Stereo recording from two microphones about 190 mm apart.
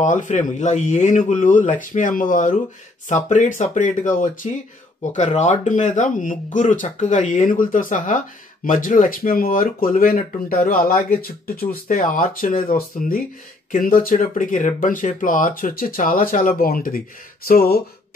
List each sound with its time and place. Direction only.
0.0 s speech: 40° left (ahead or behind)